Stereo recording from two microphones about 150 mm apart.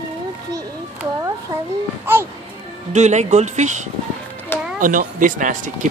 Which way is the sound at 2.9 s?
50° right (ahead or behind).